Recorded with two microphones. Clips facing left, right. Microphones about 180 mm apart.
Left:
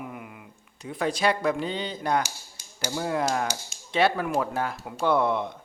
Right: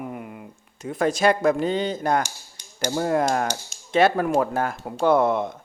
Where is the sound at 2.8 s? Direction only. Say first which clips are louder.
Right 5 dB; 50° right (ahead or behind).